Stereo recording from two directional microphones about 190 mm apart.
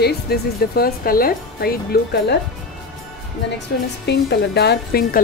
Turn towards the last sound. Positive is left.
turn(degrees=55)  # may be behind; listen again after turning